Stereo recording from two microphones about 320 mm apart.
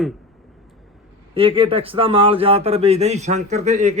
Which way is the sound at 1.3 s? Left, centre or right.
Centre.